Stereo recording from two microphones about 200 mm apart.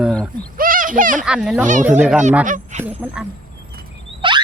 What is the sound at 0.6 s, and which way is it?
Speech, 45° right (ahead or behind).